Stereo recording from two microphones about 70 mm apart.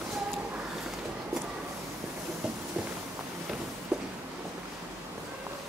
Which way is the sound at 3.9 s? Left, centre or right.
Centre.